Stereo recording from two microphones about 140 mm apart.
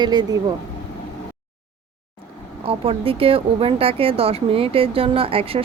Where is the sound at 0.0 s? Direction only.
30° right (ahead or behind).